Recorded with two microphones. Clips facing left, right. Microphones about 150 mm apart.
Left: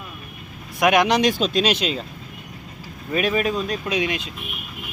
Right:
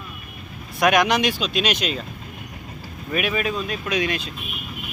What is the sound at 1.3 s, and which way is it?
Speech, 40° left (ahead or behind).